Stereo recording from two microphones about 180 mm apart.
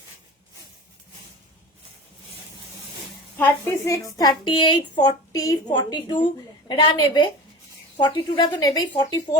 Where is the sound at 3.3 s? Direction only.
15° left (ahead or behind).